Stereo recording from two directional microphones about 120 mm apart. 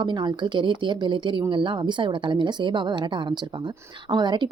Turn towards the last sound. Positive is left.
turn(degrees=-40)  # may be behind; listen again after turning